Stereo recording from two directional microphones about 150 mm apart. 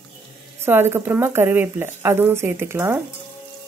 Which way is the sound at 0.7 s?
15° right (ahead or behind).